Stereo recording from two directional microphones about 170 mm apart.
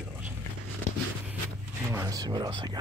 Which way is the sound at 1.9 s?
20° right (ahead or behind).